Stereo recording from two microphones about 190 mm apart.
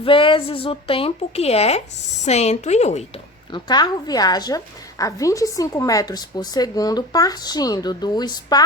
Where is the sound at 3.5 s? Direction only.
20° left (ahead or behind).